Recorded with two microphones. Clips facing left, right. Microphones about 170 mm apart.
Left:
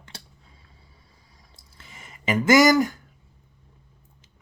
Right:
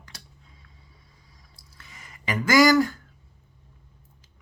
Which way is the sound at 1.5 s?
25° left (ahead or behind).